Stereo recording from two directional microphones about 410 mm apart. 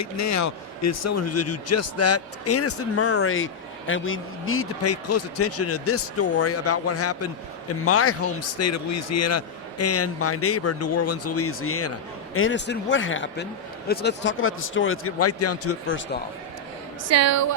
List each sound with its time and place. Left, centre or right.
0.0 s a man's voice: left
17.1 s a woman's voice: right